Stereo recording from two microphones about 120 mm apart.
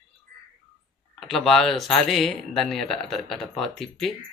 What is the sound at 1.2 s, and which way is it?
Speech, centre (ahead or behind).